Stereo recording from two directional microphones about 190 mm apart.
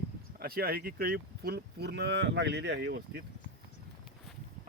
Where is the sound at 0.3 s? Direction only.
50° right (ahead or behind).